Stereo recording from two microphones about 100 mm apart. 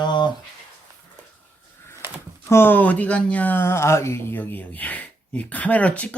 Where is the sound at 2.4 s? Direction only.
25° left (ahead or behind).